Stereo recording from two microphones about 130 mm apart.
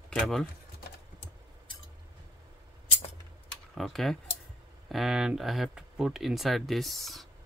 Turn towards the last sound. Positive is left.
turn(degrees=0)  # may be behind; listen again after turning